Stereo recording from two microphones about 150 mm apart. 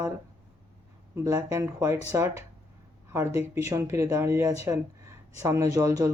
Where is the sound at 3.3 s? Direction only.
15° right (ahead or behind).